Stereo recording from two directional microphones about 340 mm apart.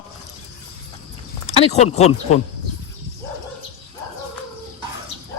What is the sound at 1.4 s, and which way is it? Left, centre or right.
Speech, centre.